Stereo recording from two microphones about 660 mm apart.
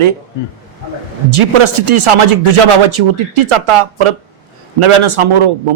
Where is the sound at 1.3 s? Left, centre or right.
Right.